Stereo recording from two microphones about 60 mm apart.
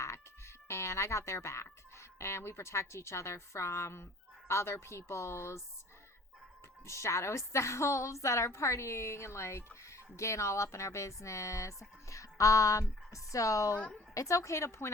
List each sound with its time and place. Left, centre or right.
0.0 s speech: left
6.8 s a woman's voice: left